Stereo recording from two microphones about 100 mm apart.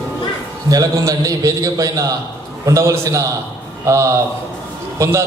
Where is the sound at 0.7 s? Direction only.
35° right (ahead or behind).